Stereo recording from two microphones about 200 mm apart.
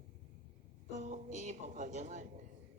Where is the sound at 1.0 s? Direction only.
40° right (ahead or behind).